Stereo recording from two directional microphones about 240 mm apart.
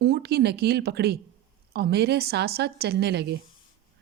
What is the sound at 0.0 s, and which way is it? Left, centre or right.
A woman's voice, right.